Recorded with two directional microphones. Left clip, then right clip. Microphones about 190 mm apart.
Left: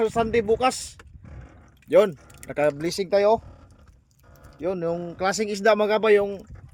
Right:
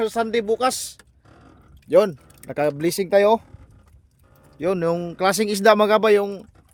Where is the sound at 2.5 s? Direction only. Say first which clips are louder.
Right 2 dB; 35° right (ahead or behind).